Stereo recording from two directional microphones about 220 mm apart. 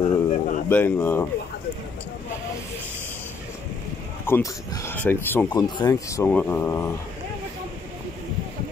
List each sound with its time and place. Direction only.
0.0 s a sound: 35° left (ahead or behind)
0.7 s speech: 10° left (ahead or behind)
4.3 s speech: 10° left (ahead or behind)